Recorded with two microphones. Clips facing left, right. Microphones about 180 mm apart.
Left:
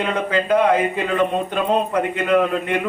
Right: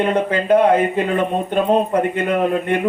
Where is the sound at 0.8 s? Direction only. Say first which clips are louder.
Right 3 dB; 50° right (ahead or behind).